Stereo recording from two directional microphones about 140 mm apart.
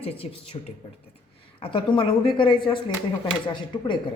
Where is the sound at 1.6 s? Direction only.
40° left (ahead or behind).